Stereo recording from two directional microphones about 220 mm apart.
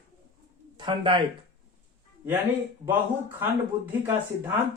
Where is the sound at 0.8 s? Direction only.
20° right (ahead or behind).